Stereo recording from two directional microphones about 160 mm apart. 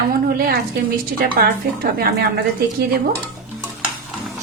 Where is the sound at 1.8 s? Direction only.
80° right.